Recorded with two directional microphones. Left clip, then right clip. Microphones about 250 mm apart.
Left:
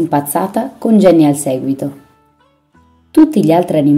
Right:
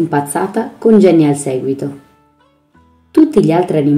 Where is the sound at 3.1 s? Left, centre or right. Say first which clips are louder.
Left 1 dB; left.